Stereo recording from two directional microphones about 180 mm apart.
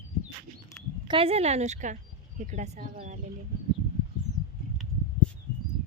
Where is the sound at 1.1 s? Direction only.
30° right (ahead or behind).